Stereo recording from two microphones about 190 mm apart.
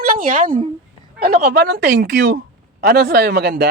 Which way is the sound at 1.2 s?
55° right (ahead or behind).